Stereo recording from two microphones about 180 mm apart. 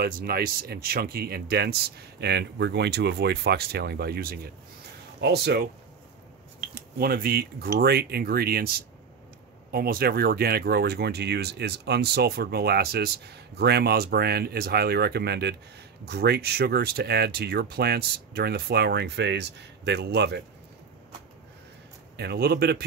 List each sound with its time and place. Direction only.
0.0 s speech: 55° right (ahead or behind)
6.7 s speech: 60° right (ahead or behind)
22.1 s speech: 65° right (ahead or behind)